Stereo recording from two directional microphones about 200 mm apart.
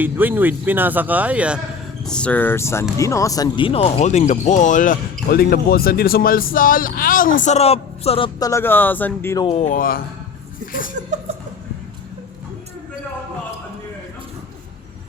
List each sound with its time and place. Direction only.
0.0 s speech: 10° right (ahead or behind)
2.0 s speech: 5° left (ahead or behind); by 8.3 s 30° left (ahead or behind)
8.4 s speech: 15° left (ahead or behind)
9.4 s speech: 30° left (ahead or behind)